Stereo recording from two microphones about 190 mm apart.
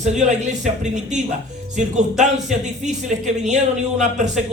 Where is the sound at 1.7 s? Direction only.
40° right (ahead or behind).